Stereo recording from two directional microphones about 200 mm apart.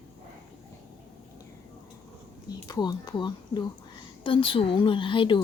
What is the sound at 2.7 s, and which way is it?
A woman's voice, 20° left (ahead or behind).